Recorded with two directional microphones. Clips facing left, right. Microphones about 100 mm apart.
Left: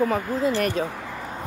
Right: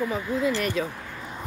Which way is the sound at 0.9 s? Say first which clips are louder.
Left 4 dB; 85° left.